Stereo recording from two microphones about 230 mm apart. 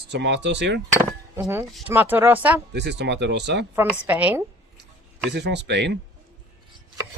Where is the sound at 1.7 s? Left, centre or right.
Centre.